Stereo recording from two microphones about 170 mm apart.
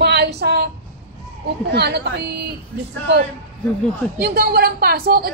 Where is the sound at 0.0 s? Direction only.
80° right.